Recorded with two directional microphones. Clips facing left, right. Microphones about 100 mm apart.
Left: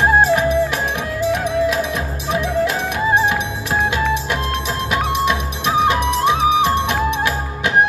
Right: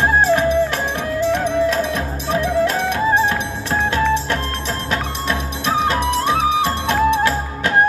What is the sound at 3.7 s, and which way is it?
Music, 15° left (ahead or behind).